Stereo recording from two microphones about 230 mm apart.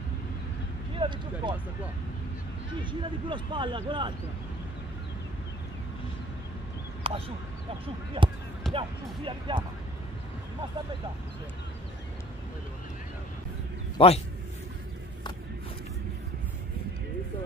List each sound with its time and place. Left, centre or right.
0.9 s speech: right
2.8 s speech: centre
7.0 s speech: right
13.9 s a man's voice: left